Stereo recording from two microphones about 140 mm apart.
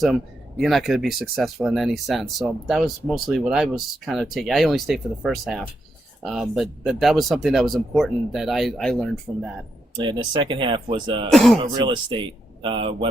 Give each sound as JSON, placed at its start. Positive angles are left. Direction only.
{"t": 0.6, "sound": "speech", "side_deg": 0}
{"t": 10.0, "sound": "speech", "side_deg": -35}
{"t": 11.3, "sound": "speech", "side_deg": 0}
{"t": 11.6, "sound": "speech", "side_deg": -35}